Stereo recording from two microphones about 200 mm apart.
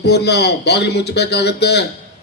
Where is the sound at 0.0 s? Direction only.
55° left (ahead or behind).